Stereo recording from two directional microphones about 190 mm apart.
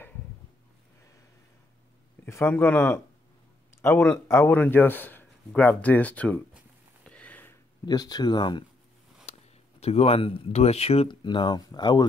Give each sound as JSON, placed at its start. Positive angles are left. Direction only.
{"t": 2.2, "sound": "speech", "side_deg": 10}
{"t": 7.1, "sound": "a sound", "side_deg": 5}
{"t": 7.8, "sound": "speech", "side_deg": 20}
{"t": 9.8, "sound": "speech", "side_deg": 30}